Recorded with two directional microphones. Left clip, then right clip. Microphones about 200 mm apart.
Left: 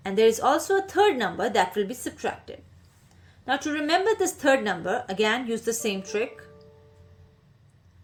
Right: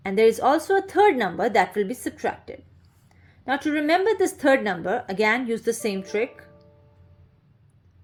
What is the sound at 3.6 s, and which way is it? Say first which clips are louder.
A woman's voice: right 3 dB; 30° right (ahead or behind).